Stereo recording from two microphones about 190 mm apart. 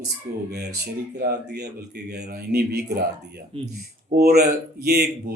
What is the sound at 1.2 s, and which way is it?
Speech, 60° right (ahead or behind).